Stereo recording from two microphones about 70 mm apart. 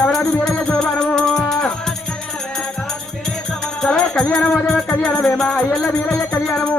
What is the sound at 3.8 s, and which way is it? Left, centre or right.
Music, centre.